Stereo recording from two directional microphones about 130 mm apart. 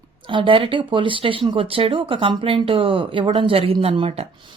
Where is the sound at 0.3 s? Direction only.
40° right (ahead or behind).